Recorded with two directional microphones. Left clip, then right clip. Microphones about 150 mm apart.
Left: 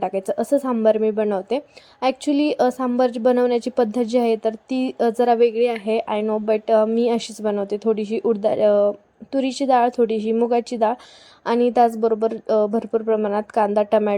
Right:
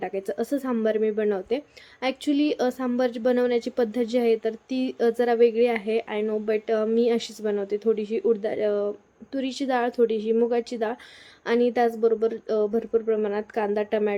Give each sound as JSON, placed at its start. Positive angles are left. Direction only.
{"t": 0.0, "sound": "a woman's voice", "side_deg": 35}